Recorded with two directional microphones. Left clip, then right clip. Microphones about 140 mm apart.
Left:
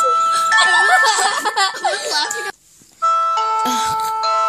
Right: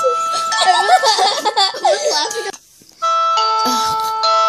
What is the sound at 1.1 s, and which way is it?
Baby laughter, 60° left (ahead or behind).